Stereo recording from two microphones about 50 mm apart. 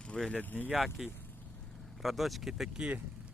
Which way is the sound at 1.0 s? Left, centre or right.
Centre.